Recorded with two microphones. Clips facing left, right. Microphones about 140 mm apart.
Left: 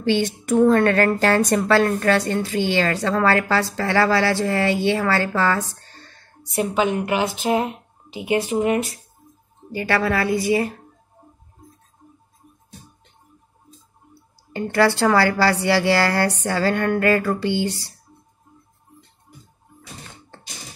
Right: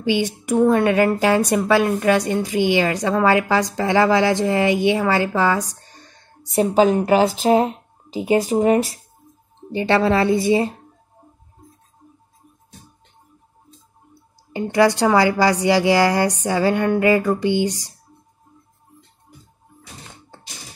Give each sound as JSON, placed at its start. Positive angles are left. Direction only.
{"t": 0.0, "sound": "a woman's voice", "side_deg": -10}
{"t": 6.5, "sound": "a woman's voice", "side_deg": -35}
{"t": 14.5, "sound": "a woman's voice", "side_deg": -15}